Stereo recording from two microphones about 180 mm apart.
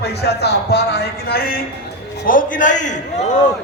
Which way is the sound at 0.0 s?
65° left (ahead or behind).